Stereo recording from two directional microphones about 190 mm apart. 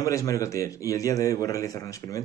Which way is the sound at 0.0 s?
15° left (ahead or behind).